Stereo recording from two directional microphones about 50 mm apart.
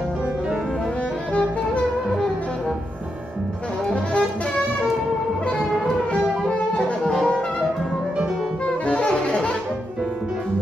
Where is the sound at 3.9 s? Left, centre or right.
Left.